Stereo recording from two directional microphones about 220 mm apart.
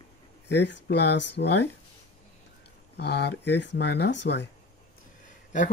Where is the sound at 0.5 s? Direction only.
50° left (ahead or behind).